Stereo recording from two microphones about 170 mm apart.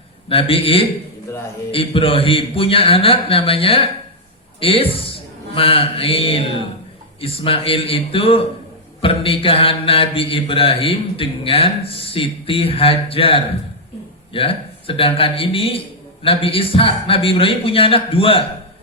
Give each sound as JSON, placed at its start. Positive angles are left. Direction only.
{"t": 0.3, "sound": "mantra", "side_deg": 35}
{"t": 4.6, "sound": "a man's voice", "side_deg": 35}
{"t": 7.2, "sound": "mantra", "side_deg": 35}